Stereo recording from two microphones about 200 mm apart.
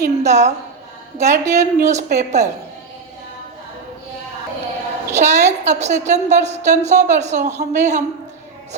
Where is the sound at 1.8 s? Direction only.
35° right (ahead or behind).